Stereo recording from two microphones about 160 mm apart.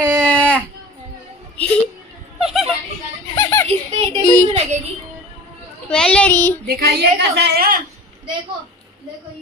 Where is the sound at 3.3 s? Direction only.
20° left (ahead or behind).